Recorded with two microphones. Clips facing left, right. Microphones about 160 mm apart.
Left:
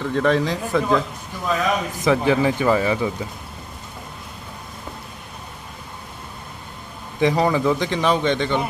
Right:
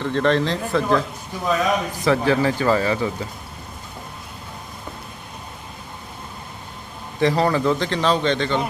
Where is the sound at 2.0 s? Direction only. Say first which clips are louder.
Left 1 dB; 15° left (ahead or behind).